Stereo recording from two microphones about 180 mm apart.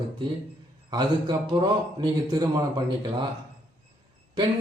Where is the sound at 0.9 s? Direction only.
25° right (ahead or behind).